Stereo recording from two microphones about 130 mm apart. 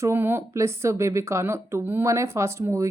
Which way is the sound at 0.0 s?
15° right (ahead or behind).